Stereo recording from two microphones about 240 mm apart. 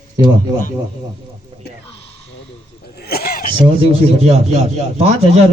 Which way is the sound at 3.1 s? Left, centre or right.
Left.